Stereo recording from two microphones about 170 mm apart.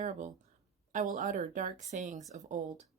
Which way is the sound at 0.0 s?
45° right (ahead or behind).